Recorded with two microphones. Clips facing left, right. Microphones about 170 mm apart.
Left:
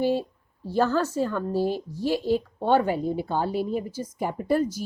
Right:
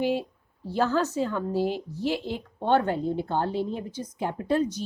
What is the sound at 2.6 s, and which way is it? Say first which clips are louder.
Speech: left 1 dB; 10° left (ahead or behind).